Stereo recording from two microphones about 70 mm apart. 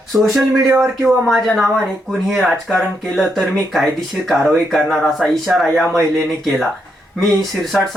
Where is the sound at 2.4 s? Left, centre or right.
Centre.